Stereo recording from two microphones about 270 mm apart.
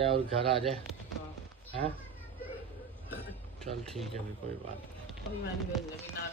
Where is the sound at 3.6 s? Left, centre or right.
Centre.